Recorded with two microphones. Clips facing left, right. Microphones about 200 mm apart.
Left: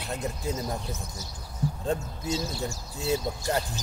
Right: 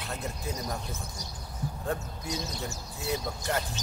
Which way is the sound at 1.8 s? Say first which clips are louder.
Left 3 dB; 25° left (ahead or behind).